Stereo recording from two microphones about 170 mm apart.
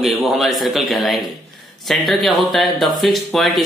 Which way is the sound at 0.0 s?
Centre (ahead or behind).